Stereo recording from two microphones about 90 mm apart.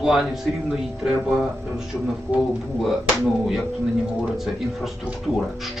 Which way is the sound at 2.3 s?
20° right (ahead or behind).